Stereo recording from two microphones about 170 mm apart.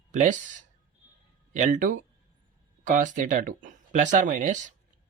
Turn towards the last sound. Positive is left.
turn(degrees=-50)  # may be behind; listen again after turning